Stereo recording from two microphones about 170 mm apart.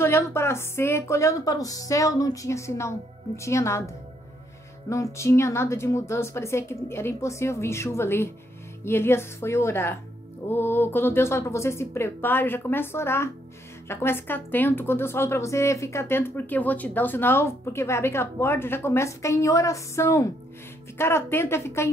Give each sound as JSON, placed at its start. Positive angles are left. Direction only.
{"t": 0.0, "sound": "a woman's voice", "side_deg": 15}